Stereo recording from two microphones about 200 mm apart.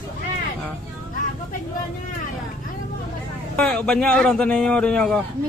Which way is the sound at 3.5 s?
5° left (ahead or behind).